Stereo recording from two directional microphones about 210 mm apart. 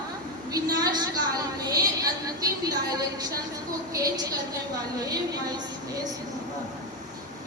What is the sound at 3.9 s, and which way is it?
A woman's voice, 15° right (ahead or behind).